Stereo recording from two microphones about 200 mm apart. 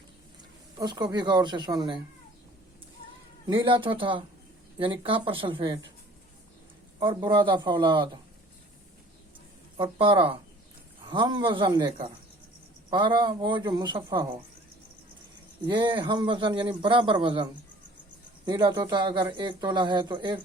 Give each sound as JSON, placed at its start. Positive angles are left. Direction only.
{"t": 0.8, "sound": "a man's voice", "side_deg": -20}
{"t": 3.4, "sound": "a man's voice", "side_deg": -25}
{"t": 7.0, "sound": "a man's voice", "side_deg": -25}
{"t": 9.7, "sound": "a man's voice", "side_deg": -25}
{"t": 15.6, "sound": "a man's voice", "side_deg": -25}